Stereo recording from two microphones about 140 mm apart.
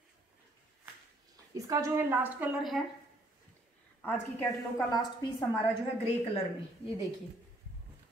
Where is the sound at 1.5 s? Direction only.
25° right (ahead or behind).